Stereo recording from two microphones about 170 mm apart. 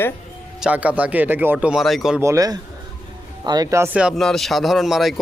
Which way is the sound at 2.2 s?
20° right (ahead or behind).